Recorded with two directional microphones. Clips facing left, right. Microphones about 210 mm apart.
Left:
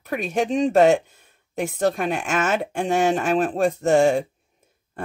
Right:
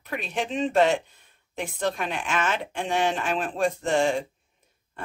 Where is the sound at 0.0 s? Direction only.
45° left (ahead or behind).